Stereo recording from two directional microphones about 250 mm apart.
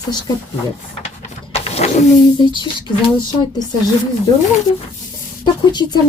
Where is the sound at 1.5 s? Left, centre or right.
Left.